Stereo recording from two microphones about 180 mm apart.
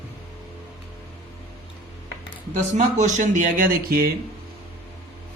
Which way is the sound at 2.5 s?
45° right (ahead or behind).